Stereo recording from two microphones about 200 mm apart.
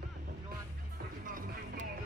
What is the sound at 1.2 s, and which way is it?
Music, 45° right (ahead or behind).